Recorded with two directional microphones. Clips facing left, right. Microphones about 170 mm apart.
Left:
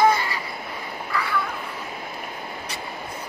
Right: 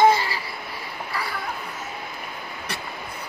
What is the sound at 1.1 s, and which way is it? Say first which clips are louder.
Crow: left 5 dB; 35° right (ahead or behind).